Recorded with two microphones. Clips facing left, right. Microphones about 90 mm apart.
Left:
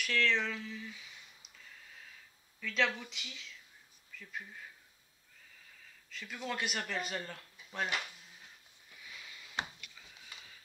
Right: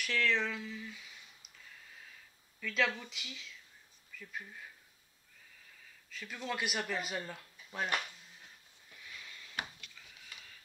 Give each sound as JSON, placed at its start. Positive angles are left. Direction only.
{"t": 0.0, "sound": "speech", "side_deg": -5}
{"t": 2.6, "sound": "speech", "side_deg": 0}
{"t": 6.0, "sound": "speech", "side_deg": 0}
{"t": 9.6, "sound": "a sound", "side_deg": 25}